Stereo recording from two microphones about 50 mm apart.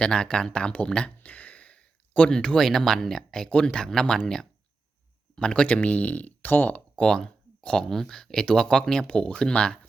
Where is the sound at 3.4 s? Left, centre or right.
Centre; by 6.8 s left.